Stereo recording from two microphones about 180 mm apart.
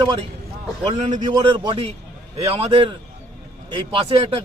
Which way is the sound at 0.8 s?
40° right (ahead or behind).